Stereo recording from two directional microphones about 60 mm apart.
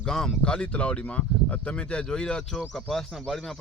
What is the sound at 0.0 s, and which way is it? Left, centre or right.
Speech, centre.